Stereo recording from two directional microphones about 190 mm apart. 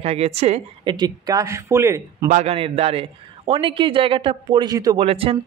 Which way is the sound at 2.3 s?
35° right (ahead or behind).